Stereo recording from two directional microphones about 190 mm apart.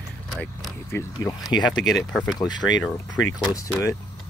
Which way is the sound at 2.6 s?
85° left.